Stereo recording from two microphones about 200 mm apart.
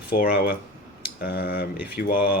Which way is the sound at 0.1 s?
50° left (ahead or behind).